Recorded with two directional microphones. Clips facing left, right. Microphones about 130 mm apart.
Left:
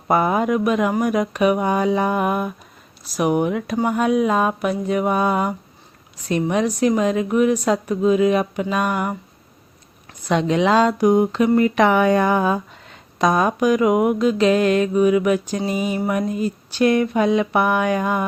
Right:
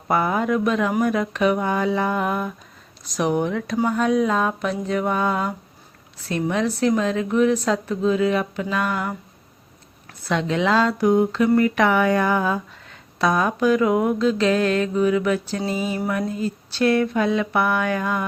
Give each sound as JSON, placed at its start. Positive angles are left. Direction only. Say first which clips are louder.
{"t": 0.1, "sound": "speech", "louder": "left 3 dB", "side_deg": 20}
{"t": 10.2, "sound": "speech", "louder": "left 3 dB", "side_deg": 15}